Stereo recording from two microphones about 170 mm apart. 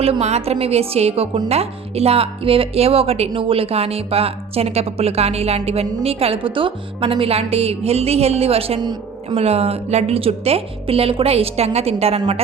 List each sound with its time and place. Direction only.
0.0 s a woman's voice: 40° right (ahead or behind)